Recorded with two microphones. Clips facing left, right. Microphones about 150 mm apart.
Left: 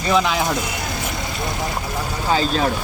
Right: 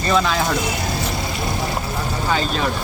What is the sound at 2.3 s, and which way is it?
Speech, 35° left (ahead or behind).